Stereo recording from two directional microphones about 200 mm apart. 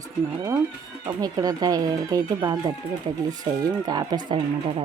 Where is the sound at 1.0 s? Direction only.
20° right (ahead or behind).